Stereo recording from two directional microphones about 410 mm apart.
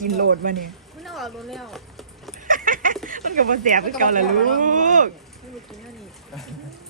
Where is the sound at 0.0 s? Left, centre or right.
Centre.